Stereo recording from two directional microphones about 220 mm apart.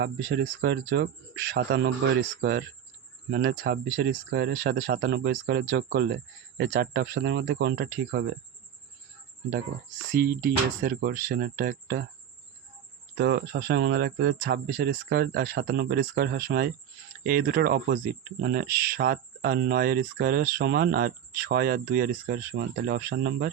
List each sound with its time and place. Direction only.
0.0 s speech: 50° right (ahead or behind)
10.1 s speech: 45° right (ahead or behind)
13.1 s speech: 50° right (ahead or behind)